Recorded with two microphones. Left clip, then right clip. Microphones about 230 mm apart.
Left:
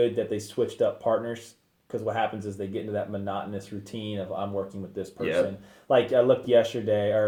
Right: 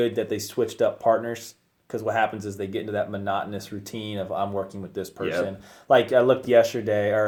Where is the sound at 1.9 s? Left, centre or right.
Right.